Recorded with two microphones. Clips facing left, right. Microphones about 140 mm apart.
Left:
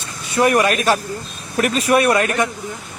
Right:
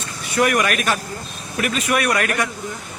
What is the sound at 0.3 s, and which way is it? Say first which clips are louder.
Speech: left 3 dB; 25° left (ahead or behind).